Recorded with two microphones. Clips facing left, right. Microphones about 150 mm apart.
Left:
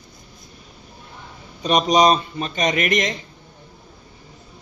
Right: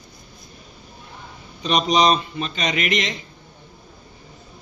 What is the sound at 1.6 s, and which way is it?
A man's voice, 45° left (ahead or behind).